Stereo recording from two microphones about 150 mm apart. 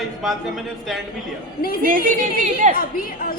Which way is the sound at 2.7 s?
70° left (ahead or behind).